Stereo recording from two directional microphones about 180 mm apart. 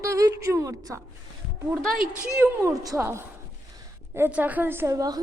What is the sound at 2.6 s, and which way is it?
Speech, 15° right (ahead or behind).